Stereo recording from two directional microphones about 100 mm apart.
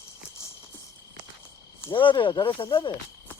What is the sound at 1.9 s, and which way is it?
Speech, 55° left (ahead or behind).